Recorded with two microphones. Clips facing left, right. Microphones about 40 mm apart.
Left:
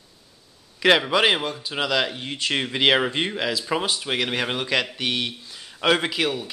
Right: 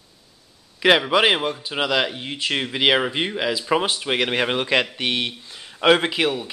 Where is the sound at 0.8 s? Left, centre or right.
Centre.